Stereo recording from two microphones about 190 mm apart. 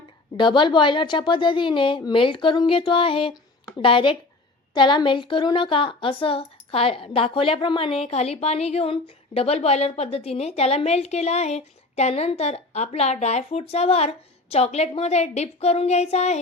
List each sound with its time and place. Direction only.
0.3 s a woman's voice: 25° left (ahead or behind)